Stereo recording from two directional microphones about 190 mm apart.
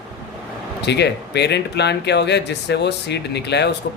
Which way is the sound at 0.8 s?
60° left (ahead or behind).